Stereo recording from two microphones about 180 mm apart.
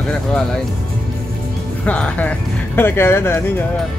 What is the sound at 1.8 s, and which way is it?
Speech, 5° left (ahead or behind).